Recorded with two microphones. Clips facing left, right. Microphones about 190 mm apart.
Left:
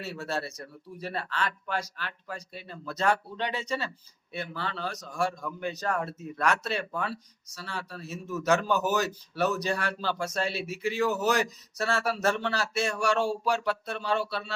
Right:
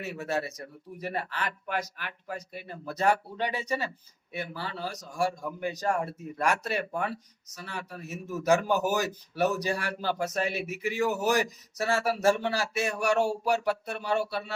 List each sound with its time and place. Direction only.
0.0 s speech: 15° right (ahead or behind)